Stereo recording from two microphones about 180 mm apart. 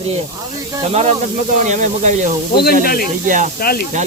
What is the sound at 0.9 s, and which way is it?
Speech, 35° right (ahead or behind).